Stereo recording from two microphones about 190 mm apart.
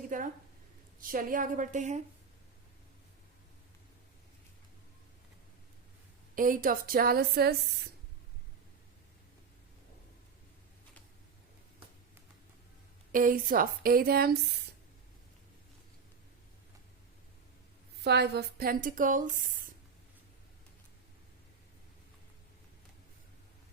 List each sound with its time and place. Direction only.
0.1 s a woman's voice: 45° right (ahead or behind)
6.3 s speech: 45° right (ahead or behind)
13.1 s speech: 45° right (ahead or behind)
18.0 s speech: 60° right (ahead or behind); by 19.5 s 45° right (ahead or behind)